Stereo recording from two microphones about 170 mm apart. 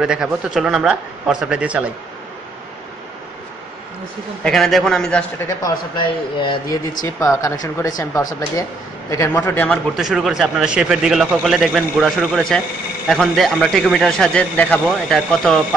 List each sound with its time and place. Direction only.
0.0 s a man's voice: 5° right (ahead or behind)
4.4 s a man's voice: centre (ahead or behind)
5.6 s a man's voice: 30° left (ahead or behind)
7.2 s a man's voice: 20° left (ahead or behind)
9.9 s a man's voice: centre (ahead or behind)